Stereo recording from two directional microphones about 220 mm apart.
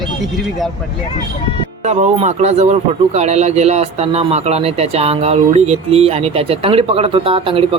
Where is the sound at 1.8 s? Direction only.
30° right (ahead or behind).